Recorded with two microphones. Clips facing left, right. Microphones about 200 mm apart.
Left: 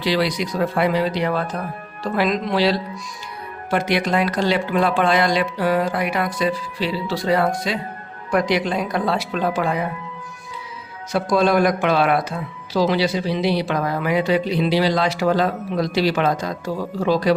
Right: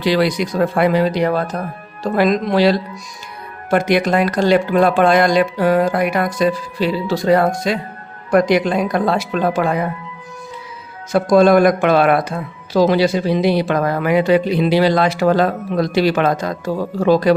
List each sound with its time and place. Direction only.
0.0 s speech: 50° right (ahead or behind)
11.1 s speech: 50° right (ahead or behind)